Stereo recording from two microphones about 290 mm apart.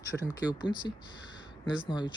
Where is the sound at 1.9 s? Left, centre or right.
Centre.